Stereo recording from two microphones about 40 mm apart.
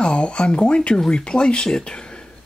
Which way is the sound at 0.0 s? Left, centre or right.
Left.